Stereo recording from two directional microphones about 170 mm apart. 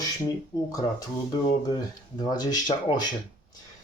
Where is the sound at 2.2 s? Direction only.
25° left (ahead or behind).